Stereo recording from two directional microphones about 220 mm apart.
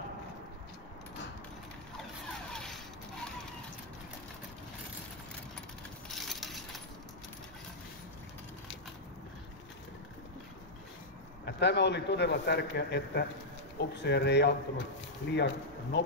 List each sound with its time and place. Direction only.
2.5 s mechanisms: 5° left (ahead or behind)
6.1 s mechanisms: centre (ahead or behind)
11.4 s a man's voice: 50° left (ahead or behind)